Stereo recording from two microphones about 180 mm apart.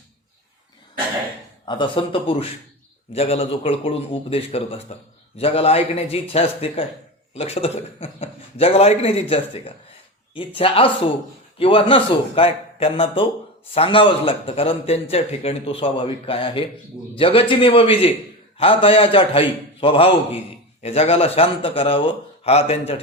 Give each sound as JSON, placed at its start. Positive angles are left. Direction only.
{"t": 1.6, "sound": "a man's voice", "side_deg": 25}